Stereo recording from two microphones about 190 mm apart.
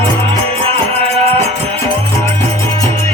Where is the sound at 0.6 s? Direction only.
30° right (ahead or behind).